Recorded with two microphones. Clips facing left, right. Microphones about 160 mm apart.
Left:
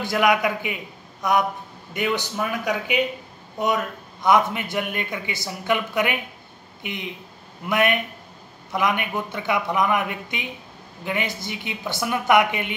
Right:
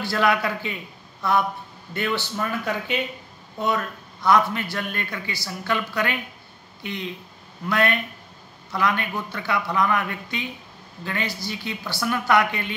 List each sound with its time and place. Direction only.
0.0 s a man's voice: 20° left (ahead or behind)